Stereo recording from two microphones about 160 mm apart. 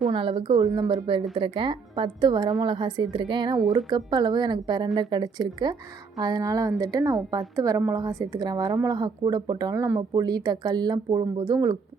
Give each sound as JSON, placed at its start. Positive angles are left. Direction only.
{"t": 0.1, "sound": "a woman's voice", "side_deg": -35}